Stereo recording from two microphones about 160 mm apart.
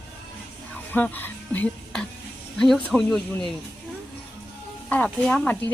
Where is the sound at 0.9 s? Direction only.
10° left (ahead or behind).